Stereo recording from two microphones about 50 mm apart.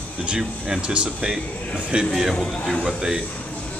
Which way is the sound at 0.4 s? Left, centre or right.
Centre.